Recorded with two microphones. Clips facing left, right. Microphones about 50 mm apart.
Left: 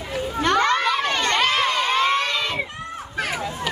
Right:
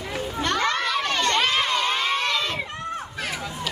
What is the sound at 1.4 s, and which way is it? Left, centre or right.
Crowd, centre.